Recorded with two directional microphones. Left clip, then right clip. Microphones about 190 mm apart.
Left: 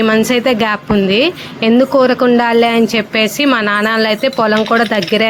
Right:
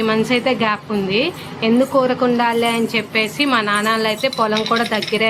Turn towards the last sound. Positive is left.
turn(degrees=35)  # may be behind; listen again after turning